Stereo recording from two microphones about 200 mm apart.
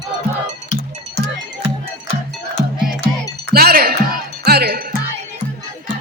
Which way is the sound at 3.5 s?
50° right (ahead or behind).